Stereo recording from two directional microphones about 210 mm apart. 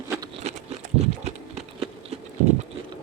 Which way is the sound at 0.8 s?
35° right (ahead or behind).